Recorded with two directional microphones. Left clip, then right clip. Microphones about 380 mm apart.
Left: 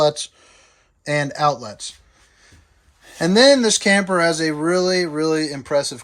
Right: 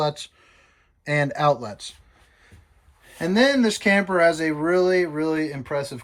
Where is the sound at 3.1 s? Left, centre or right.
Centre.